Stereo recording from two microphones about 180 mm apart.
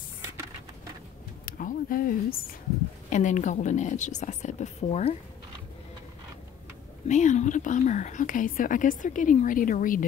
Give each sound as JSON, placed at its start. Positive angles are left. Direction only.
{"t": 1.4, "sound": "a woman's voice", "side_deg": 50}
{"t": 7.1, "sound": "speech", "side_deg": 40}